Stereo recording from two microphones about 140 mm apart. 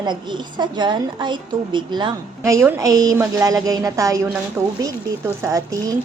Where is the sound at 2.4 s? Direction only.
20° right (ahead or behind).